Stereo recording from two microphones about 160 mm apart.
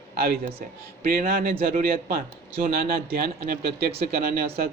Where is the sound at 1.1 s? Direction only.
65° right (ahead or behind).